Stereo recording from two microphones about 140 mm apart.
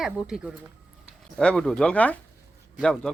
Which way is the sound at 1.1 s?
5° left (ahead or behind).